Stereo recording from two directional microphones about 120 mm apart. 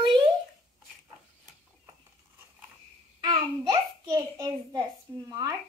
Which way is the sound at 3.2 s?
35° right (ahead or behind).